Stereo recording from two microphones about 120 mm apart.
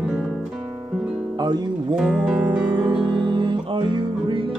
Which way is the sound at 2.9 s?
40° right (ahead or behind).